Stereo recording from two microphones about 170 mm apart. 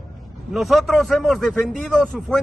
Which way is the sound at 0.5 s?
Centre (ahead or behind).